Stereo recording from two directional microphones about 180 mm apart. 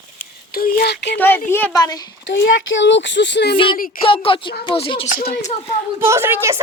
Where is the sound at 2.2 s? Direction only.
90° left; by 3.6 s 70° left (ahead or behind).